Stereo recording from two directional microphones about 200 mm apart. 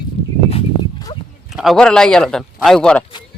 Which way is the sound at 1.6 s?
Centre (ahead or behind).